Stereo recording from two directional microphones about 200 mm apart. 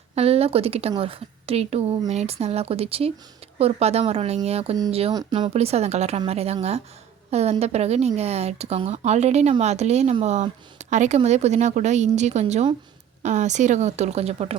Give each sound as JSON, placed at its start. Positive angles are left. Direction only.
{"t": 0.2, "sound": "a woman's voice", "side_deg": -30}